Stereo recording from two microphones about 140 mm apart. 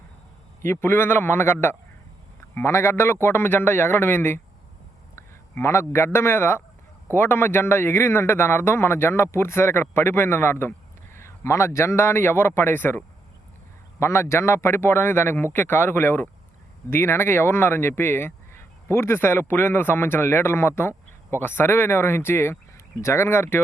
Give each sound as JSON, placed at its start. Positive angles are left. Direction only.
{"t": 0.6, "sound": "speech", "side_deg": 15}
{"t": 2.6, "sound": "a man's voice", "side_deg": 20}